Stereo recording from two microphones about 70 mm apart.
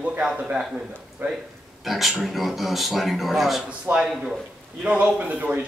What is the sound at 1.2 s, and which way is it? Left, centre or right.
Speech, right.